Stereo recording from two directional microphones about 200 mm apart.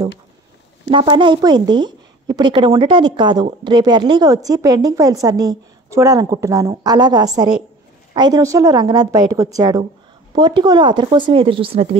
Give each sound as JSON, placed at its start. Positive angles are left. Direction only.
{"t": 0.8, "sound": "a woman's voice", "side_deg": -25}